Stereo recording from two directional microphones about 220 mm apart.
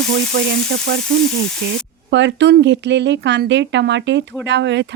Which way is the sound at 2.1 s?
55° right (ahead or behind).